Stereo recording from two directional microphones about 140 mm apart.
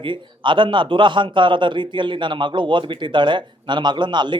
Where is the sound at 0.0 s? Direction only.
35° right (ahead or behind).